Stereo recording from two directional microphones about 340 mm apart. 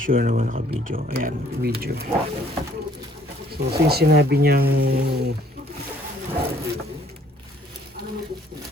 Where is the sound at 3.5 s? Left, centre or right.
Right.